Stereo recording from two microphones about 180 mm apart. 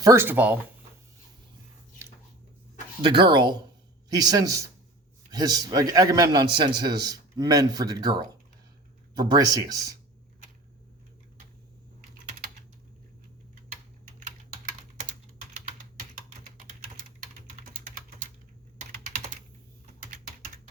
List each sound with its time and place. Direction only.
0.0 s speech: 15° right (ahead or behind)
3.0 s a man's voice: 25° right (ahead or behind)